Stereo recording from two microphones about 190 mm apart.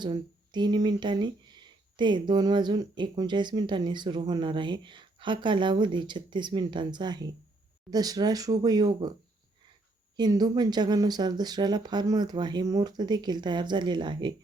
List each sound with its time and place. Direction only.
0.0 s speech: 25° right (ahead or behind)
10.2 s speech: 20° right (ahead or behind)